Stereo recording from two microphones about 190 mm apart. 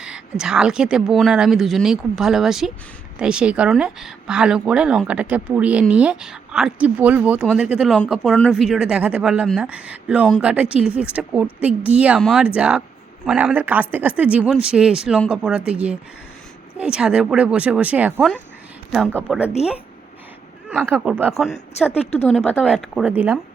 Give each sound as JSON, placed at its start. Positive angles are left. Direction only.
{"t": 0.0, "sound": "speech", "side_deg": -5}
{"t": 19.3, "sound": "speech", "side_deg": 0}
{"t": 20.7, "sound": "speech", "side_deg": -10}
{"t": 22.0, "sound": "a woman's voice", "side_deg": 35}
{"t": 22.3, "sound": "speech", "side_deg": 0}